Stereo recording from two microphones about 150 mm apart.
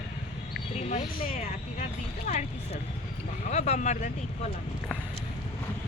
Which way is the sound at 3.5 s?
50° left (ahead or behind).